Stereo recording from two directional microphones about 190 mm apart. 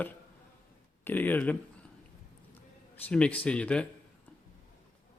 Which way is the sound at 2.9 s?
5° left (ahead or behind).